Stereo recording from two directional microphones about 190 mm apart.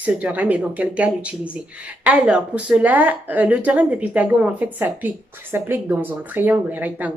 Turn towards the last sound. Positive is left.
turn(degrees=-10)  # may be behind; listen again after turning